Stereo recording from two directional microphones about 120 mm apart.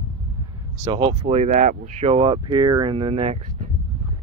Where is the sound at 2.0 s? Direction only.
50° right (ahead or behind).